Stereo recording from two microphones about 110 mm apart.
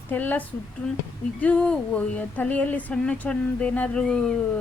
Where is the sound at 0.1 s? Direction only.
15° left (ahead or behind).